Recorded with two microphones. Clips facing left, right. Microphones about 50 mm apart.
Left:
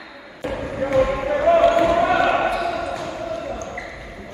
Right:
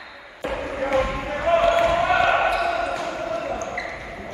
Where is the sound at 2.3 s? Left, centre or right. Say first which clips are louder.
Even; right.